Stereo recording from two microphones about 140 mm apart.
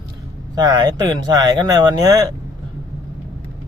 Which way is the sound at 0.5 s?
30° right (ahead or behind).